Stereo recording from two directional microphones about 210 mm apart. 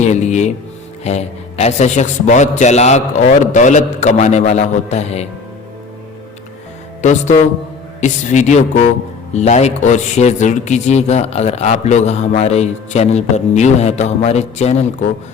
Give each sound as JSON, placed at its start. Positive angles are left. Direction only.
{"t": 0.0, "sound": "speech", "side_deg": 35}
{"t": 7.0, "sound": "speech", "side_deg": 35}